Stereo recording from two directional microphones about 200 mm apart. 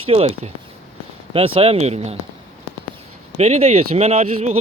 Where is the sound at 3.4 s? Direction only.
35° right (ahead or behind).